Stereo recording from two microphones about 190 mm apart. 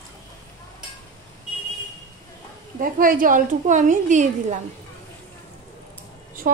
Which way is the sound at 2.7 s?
45° right (ahead or behind).